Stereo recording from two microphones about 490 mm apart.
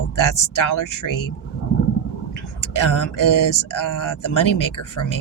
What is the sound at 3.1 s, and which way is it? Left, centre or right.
Speech, left.